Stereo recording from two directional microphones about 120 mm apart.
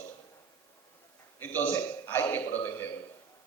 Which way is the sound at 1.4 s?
15° left (ahead or behind).